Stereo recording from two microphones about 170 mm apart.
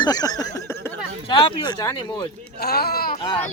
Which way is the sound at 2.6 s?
65° left (ahead or behind).